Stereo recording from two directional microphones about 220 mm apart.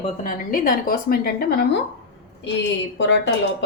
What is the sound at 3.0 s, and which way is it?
Speech, 55° left (ahead or behind).